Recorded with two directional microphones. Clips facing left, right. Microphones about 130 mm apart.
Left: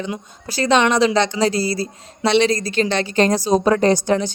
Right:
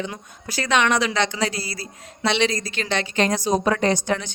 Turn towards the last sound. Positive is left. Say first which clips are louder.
# left 5 dB
turn(degrees=35)  # may be behind; listen again after turning